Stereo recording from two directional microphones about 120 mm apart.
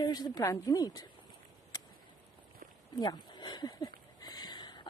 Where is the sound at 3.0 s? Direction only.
35° left (ahead or behind).